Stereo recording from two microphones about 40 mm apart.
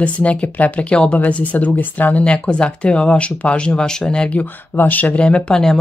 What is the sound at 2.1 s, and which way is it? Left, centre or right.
Speech, left.